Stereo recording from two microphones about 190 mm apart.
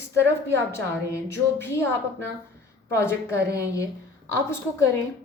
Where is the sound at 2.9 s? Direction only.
15° left (ahead or behind).